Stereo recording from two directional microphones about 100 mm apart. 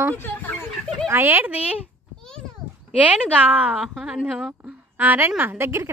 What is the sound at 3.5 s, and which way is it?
A woman's voice, 15° right (ahead or behind).